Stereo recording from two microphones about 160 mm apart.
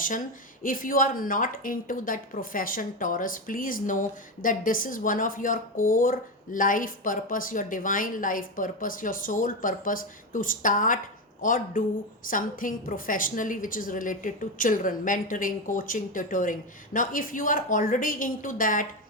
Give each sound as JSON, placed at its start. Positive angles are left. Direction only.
{"t": 0.6, "sound": "a woman's voice", "side_deg": 60}